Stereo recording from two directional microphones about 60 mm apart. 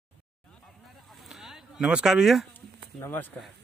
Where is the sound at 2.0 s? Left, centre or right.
Centre.